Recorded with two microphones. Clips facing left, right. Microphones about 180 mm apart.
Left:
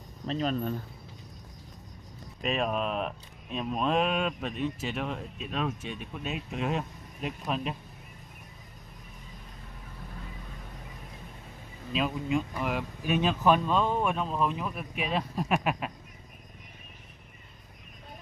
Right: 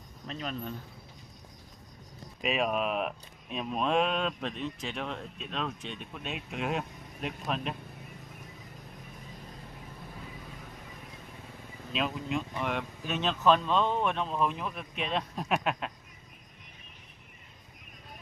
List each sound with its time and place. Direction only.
0.3 s speech: 35° left (ahead or behind)
2.4 s speech: 5° right (ahead or behind)
11.9 s speech: 5° left (ahead or behind)